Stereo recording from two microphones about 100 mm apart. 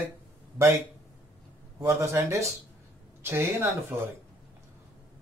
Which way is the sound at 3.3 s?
25° right (ahead or behind).